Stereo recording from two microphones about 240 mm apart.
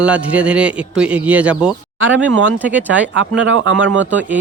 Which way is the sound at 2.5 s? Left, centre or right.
Centre.